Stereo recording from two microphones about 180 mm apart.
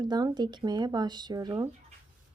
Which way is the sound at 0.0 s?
25° right (ahead or behind).